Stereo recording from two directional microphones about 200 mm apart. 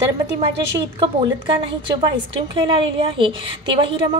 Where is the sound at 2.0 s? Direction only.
25° right (ahead or behind).